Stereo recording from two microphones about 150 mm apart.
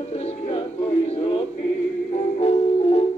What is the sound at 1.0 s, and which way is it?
Music, 40° left (ahead or behind).